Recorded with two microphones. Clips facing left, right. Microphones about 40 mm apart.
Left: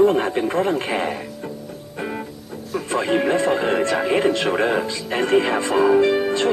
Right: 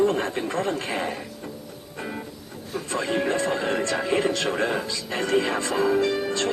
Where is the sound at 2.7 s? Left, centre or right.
Left.